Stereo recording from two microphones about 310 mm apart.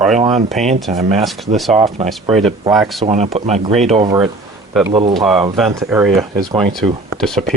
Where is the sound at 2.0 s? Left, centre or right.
Centre.